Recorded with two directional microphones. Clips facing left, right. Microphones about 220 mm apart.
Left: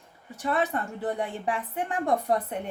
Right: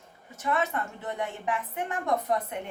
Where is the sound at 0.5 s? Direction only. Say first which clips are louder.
Left 2 dB; 35° left (ahead or behind).